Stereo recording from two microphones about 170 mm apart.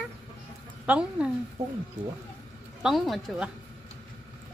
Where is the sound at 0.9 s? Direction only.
5° right (ahead or behind).